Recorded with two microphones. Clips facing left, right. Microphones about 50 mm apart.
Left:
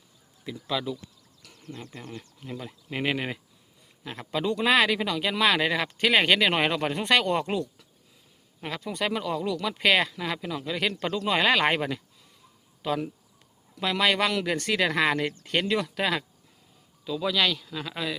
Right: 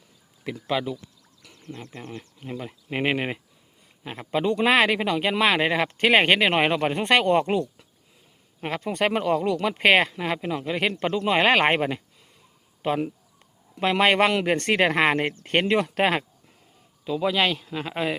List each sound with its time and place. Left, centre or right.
0.7 s speech: right
1.6 s speech: centre
2.4 s speech: right
6.5 s speech: right
17.0 s speech: right